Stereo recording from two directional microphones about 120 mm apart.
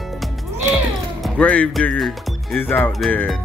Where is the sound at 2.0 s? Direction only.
Centre (ahead or behind).